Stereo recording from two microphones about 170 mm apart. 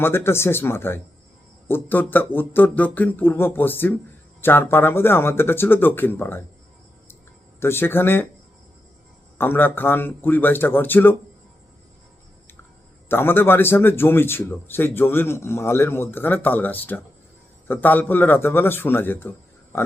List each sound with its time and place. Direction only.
0.0 s a man's voice: 15° left (ahead or behind)
7.6 s a man's voice: 15° left (ahead or behind)
9.4 s a man's voice: 10° left (ahead or behind)
13.1 s a man's voice: 15° left (ahead or behind)